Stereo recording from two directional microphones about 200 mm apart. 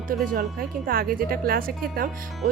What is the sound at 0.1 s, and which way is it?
Speech, 45° right (ahead or behind).